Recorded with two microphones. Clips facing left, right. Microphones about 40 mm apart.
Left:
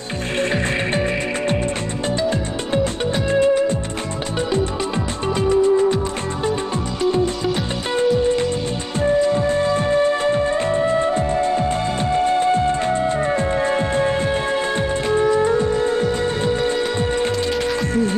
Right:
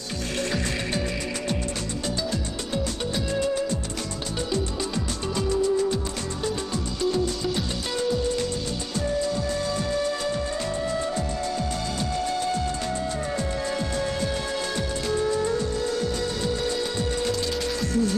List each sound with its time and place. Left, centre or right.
0.4 s music: left
2.2 s music: left
5.4 s music: left
7.0 s music: left